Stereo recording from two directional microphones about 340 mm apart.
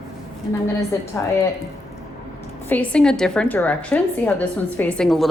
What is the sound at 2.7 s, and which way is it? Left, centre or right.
A woman's voice, centre.